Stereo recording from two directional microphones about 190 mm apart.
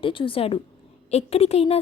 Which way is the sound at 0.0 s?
25° left (ahead or behind).